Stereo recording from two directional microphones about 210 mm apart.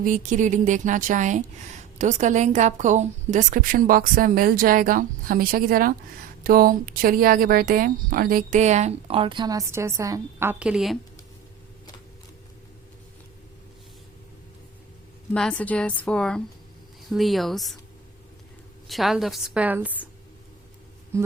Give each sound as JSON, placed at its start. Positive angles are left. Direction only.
{"t": 0.0, "sound": "speech", "side_deg": -40}
{"t": 15.3, "sound": "a woman's voice", "side_deg": 5}
{"t": 18.9, "sound": "a woman's voice", "side_deg": 0}
{"t": 21.1, "sound": "a sound", "side_deg": -15}